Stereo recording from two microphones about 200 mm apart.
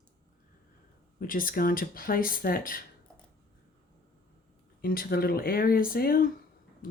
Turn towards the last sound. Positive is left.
turn(degrees=45)  # may be behind; listen again after turning